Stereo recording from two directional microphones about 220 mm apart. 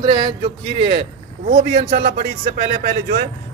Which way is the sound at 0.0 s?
20° right (ahead or behind).